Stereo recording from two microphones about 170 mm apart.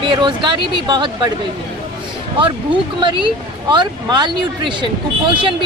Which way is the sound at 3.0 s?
30° right (ahead or behind).